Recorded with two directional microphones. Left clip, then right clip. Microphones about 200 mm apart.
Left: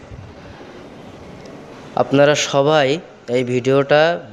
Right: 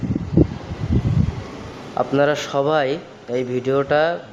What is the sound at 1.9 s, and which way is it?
A man's voice, 35° left (ahead or behind).